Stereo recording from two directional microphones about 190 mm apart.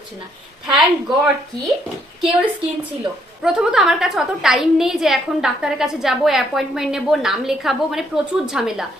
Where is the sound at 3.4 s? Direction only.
5° right (ahead or behind).